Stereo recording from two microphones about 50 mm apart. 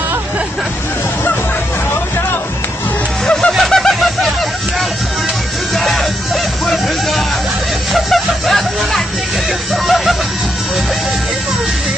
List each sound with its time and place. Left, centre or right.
3.3 s music: centre
3.5 s a sound: centre
5.8 s music: centre